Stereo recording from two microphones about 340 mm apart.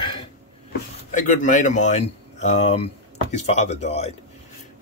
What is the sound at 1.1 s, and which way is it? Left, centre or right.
Speech, left.